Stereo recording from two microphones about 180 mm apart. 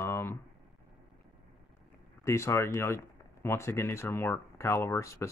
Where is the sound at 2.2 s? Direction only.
15° left (ahead or behind).